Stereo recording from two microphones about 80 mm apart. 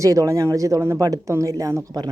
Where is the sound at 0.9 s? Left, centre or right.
Right.